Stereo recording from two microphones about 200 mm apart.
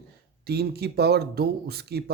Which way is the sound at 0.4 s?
55° right (ahead or behind).